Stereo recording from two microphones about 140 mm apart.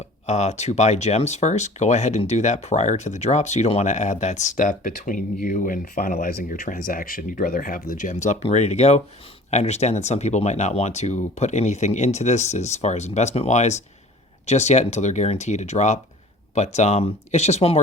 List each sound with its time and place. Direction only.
0.3 s speech: 55° left (ahead or behind)